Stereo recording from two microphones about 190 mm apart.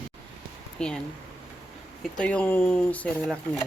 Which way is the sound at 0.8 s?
5° left (ahead or behind).